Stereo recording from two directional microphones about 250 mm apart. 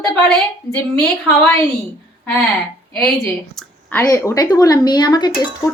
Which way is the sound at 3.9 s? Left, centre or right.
Centre.